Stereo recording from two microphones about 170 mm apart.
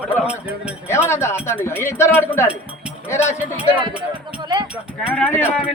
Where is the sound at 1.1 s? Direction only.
15° left (ahead or behind).